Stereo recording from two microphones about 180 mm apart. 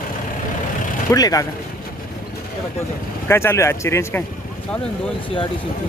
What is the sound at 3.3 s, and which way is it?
Speech, 15° left (ahead or behind).